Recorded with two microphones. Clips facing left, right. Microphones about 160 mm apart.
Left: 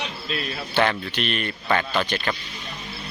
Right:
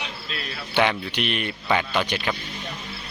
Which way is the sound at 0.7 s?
15° right (ahead or behind).